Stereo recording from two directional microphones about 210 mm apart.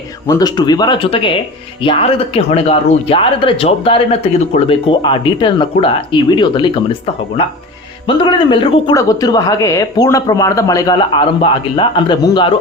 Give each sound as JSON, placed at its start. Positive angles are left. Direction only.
{"t": 0.3, "sound": "speech", "side_deg": 20}
{"t": 8.0, "sound": "speech", "side_deg": 20}